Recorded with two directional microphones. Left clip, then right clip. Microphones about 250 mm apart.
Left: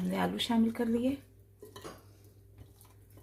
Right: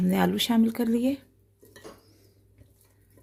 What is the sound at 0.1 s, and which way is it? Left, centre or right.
Speech, right.